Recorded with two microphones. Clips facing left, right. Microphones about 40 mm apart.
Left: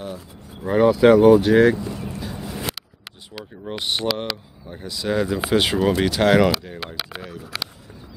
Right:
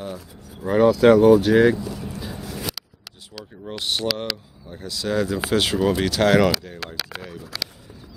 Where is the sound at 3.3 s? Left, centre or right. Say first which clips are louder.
Left 2 dB; centre.